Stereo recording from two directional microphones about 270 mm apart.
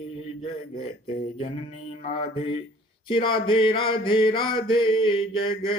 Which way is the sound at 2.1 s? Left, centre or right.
Centre.